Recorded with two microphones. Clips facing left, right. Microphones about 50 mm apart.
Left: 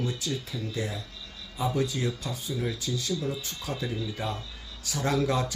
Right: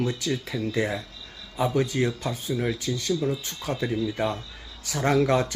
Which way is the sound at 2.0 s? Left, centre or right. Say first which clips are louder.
Right 5 dB; right.